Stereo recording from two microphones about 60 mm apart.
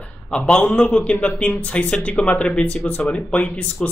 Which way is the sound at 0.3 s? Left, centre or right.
Centre.